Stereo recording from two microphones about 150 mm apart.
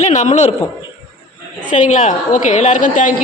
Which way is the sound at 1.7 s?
55° left (ahead or behind).